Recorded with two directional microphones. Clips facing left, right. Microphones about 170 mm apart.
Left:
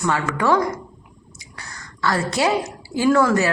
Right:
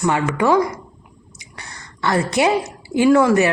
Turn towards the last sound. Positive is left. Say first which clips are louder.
# right 3 dB
turn(degrees=-20)  # may be behind; listen again after turning